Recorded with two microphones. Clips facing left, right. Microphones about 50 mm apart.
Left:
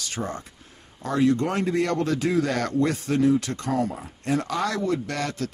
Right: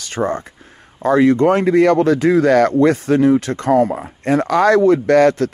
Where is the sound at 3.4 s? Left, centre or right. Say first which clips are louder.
Right 11 dB; right.